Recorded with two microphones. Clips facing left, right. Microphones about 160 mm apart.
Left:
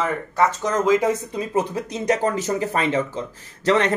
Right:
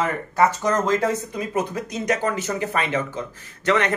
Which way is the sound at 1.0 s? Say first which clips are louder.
Left 2 dB; 25° left (ahead or behind).